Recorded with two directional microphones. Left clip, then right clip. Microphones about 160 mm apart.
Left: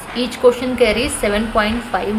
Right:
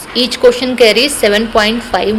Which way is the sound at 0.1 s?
35° right (ahead or behind).